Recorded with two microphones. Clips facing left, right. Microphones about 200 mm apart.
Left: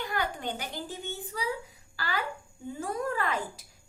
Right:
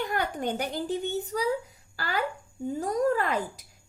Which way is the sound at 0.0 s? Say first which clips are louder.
Right 4 dB; 45° right (ahead or behind).